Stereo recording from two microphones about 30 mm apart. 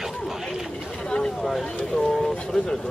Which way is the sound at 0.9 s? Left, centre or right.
Left.